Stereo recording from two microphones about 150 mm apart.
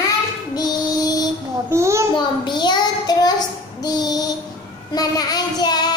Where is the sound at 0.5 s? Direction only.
25° left (ahead or behind).